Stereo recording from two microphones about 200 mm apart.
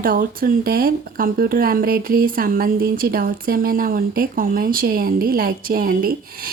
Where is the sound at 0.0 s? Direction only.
45° right (ahead or behind).